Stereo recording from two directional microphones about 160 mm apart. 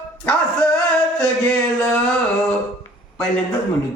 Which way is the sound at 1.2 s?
5° left (ahead or behind).